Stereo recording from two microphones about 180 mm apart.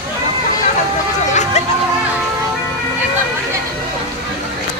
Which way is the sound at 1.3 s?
40° left (ahead or behind).